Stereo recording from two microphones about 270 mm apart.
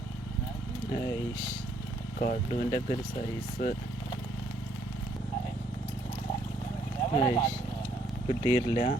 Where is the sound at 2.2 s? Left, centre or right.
Left.